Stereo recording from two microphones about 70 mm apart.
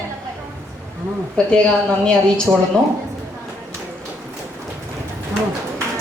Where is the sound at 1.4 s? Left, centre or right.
Centre.